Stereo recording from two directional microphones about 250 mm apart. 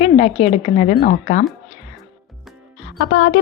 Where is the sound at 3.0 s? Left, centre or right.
Left.